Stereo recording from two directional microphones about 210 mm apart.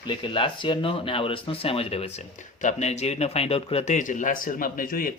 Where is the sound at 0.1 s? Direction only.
25° left (ahead or behind).